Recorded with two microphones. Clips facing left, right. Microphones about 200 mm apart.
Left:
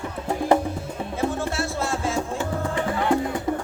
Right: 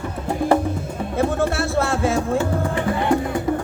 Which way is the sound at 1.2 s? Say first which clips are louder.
Right 5 dB; 60° right (ahead or behind).